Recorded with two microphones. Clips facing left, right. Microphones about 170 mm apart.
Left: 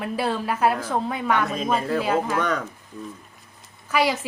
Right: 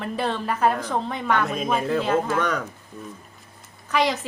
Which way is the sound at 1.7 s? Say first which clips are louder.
Even; 5° right (ahead or behind).